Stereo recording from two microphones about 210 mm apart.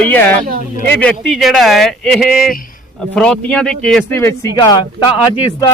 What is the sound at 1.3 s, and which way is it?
Speech, centre (ahead or behind).